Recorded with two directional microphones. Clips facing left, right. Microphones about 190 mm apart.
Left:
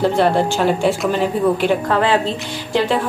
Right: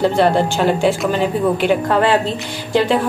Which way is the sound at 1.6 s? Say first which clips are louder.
Right 2 dB; 5° right (ahead or behind).